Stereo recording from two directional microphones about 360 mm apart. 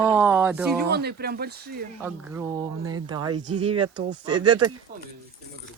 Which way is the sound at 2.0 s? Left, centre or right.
Centre.